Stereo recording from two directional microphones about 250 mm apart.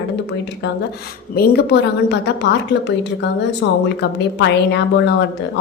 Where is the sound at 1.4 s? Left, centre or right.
Left.